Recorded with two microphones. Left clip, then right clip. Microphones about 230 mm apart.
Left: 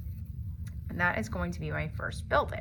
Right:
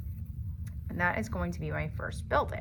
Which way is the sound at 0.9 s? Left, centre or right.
Right.